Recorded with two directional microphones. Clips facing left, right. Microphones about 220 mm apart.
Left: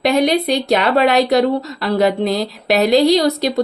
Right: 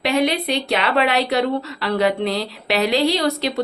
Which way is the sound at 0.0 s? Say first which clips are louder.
Left 4 dB; 40° left (ahead or behind).